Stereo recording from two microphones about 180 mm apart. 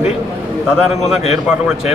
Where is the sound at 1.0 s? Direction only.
35° left (ahead or behind).